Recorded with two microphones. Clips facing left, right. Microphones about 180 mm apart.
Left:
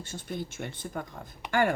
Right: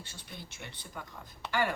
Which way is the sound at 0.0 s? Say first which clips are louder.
Left 12 dB; 45° left (ahead or behind).